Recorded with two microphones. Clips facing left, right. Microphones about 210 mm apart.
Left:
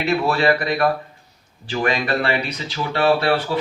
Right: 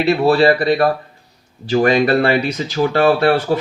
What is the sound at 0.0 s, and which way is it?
Speech, 35° right (ahead or behind).